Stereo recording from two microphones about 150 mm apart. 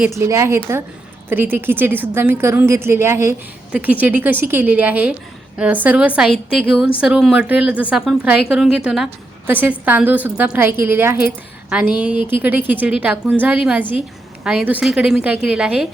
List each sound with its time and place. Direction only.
0.2 s a woman's voice: 20° right (ahead or behind)